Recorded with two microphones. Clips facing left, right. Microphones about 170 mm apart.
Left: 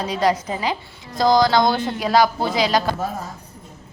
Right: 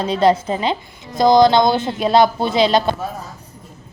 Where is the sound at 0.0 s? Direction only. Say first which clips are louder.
Right 5 dB; 25° right (ahead or behind).